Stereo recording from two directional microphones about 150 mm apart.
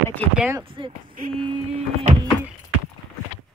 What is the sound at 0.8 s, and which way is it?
Speech, 35° right (ahead or behind).